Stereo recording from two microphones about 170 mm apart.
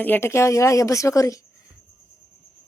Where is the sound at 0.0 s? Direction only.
10° left (ahead or behind).